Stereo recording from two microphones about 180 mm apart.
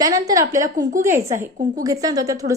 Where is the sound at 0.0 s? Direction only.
20° right (ahead or behind).